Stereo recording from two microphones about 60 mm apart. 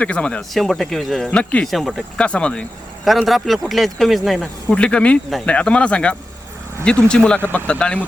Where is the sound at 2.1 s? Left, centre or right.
Centre.